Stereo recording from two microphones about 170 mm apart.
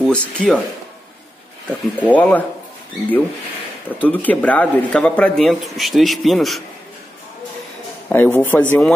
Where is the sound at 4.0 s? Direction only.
10° left (ahead or behind).